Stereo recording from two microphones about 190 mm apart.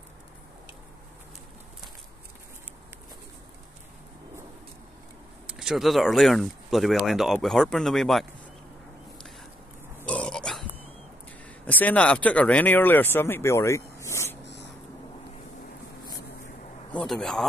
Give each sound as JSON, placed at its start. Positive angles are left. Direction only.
{"t": 5.5, "sound": "speech", "side_deg": -5}
{"t": 10.0, "sound": "pig", "side_deg": 5}
{"t": 11.6, "sound": "speech", "side_deg": 10}
{"t": 14.4, "sound": "a sound", "side_deg": 65}
{"t": 16.9, "sound": "a man's voice", "side_deg": 0}